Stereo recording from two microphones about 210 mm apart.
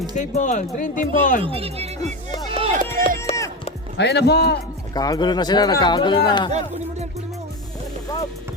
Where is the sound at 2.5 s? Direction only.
25° right (ahead or behind).